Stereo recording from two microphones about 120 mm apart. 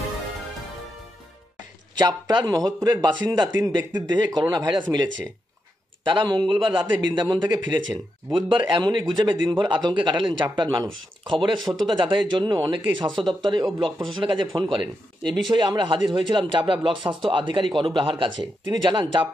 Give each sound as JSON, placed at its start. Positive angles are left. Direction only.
{"t": 2.0, "sound": "speech", "side_deg": -35}
{"t": 14.7, "sound": "speech", "side_deg": 0}
{"t": 15.5, "sound": "speech", "side_deg": -40}